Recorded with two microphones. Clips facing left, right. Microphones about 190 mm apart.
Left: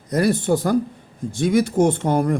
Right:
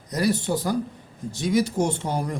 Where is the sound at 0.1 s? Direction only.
55° left (ahead or behind).